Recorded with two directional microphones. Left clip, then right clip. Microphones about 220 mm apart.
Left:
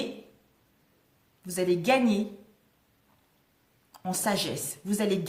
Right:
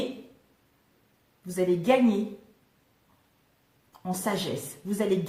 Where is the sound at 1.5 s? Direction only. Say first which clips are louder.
Right 1 dB; 45° left (ahead or behind).